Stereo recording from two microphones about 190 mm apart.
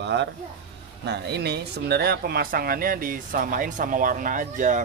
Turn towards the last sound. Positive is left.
turn(degrees=-40)  # may be behind; listen again after turning